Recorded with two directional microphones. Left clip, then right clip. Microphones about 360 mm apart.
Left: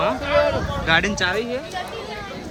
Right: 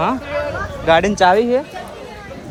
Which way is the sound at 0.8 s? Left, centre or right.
Centre.